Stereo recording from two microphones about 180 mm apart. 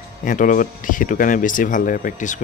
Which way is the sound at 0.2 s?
50° left (ahead or behind).